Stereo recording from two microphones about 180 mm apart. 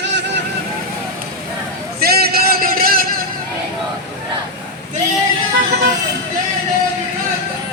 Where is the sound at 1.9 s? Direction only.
60° right (ahead or behind).